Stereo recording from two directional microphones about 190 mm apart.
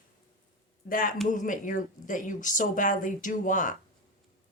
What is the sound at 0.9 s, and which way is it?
Speech, 45° left (ahead or behind).